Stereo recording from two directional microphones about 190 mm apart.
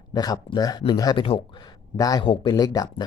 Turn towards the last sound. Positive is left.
turn(degrees=20)  # may be behind; listen again after turning